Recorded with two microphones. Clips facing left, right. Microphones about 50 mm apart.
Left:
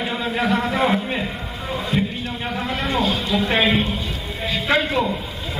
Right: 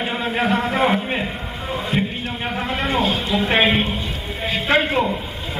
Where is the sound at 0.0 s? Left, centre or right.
Right.